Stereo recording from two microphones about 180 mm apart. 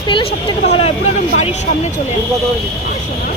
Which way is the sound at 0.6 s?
30° left (ahead or behind).